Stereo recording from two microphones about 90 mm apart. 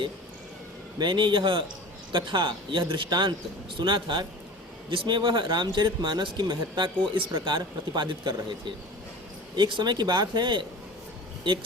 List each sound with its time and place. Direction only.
0.9 s speech: 60° right (ahead or behind)
7.4 s speech: 60° right (ahead or behind)
9.6 s speech: 60° right (ahead or behind)